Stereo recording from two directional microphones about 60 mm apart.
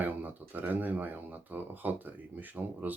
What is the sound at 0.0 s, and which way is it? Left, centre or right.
Speech, right.